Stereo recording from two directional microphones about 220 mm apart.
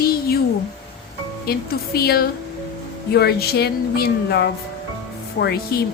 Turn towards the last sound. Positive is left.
turn(degrees=45)  # may be behind; listen again after turning